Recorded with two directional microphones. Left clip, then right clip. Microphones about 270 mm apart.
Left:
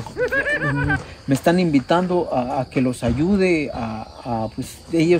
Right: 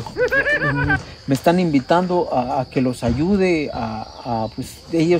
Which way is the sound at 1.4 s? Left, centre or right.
Centre.